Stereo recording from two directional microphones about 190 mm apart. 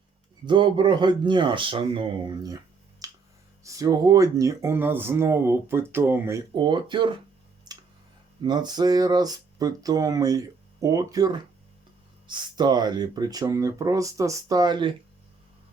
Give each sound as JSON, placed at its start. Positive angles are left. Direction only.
{"t": 0.4, "sound": "speech", "side_deg": -25}
{"t": 3.0, "sound": "finger snapping", "side_deg": -20}
{"t": 3.6, "sound": "speech", "side_deg": -15}
{"t": 6.5, "sound": "speech", "side_deg": -25}
{"t": 7.7, "sound": "tick-tock", "side_deg": -20}
{"t": 8.4, "sound": "speech", "side_deg": -20}